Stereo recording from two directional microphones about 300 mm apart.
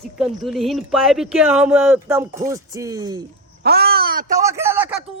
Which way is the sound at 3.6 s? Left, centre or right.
Right.